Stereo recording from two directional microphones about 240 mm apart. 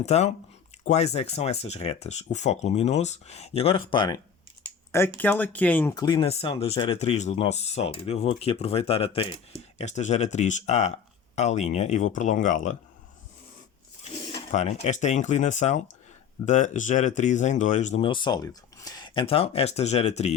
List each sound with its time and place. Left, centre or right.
0.0 s speech: left
14.5 s speech: left